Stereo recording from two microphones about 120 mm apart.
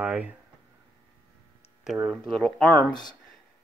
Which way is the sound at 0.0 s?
10° right (ahead or behind).